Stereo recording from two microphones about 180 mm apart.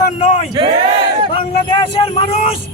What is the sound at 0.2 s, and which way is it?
Crowd, 35° left (ahead or behind).